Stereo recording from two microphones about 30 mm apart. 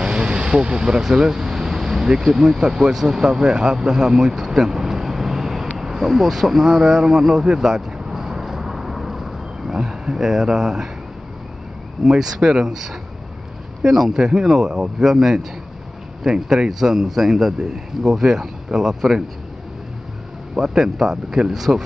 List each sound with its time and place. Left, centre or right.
0.0 s vehicle: right
2.2 s a man's voice: centre
3.2 s speech: right
5.8 s a sound: centre
9.8 s speech: centre
12.1 s a man's voice: right
14.1 s speech: right
14.4 s a man's voice: centre
20.5 s a man's voice: centre